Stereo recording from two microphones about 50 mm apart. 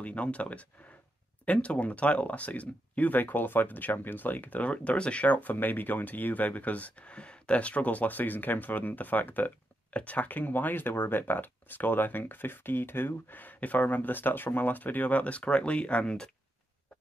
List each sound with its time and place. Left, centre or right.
0.0 s speech: left